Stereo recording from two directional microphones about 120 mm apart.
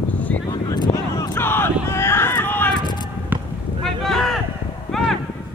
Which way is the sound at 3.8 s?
5° left (ahead or behind).